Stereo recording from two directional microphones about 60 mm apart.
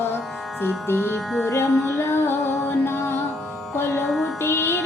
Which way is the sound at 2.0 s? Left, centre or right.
Left.